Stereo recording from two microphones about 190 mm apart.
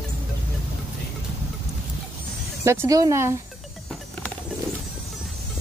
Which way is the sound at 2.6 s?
15° right (ahead or behind).